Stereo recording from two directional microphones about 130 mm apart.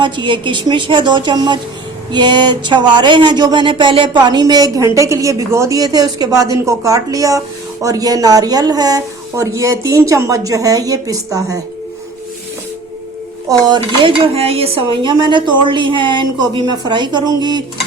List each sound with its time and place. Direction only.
0.0 s a woman's voice: 40° right (ahead or behind)
13.5 s speech: 35° right (ahead or behind)
14.2 s speech: 50° right (ahead or behind); by 17.6 s 35° right (ahead or behind)